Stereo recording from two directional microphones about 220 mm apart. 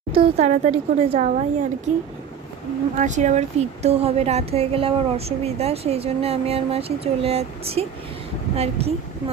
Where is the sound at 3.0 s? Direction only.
35° right (ahead or behind).